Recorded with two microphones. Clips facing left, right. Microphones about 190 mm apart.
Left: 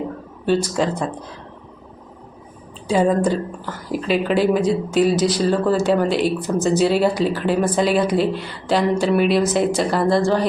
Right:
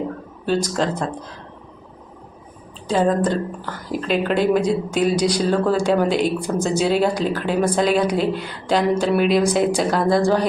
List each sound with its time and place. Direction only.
0.4 s a woman's voice: 5° left (ahead or behind)
2.8 s a woman's voice: 10° left (ahead or behind)